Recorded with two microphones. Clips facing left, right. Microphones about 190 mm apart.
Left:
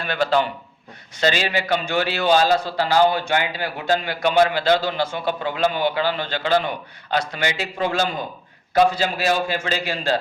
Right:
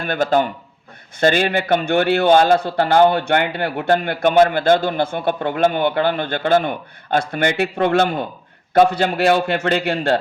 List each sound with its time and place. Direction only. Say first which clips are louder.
0.0 s a man's voice: right 3 dB; 50° right (ahead or behind)